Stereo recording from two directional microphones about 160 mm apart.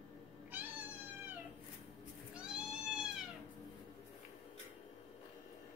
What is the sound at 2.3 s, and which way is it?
Cat, 5° right (ahead or behind).